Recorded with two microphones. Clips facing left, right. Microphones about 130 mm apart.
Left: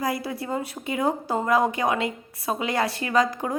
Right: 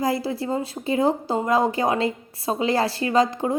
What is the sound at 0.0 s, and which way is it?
A woman's voice, 25° right (ahead or behind).